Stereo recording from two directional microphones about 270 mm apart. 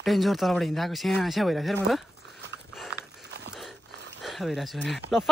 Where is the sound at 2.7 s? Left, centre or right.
Centre.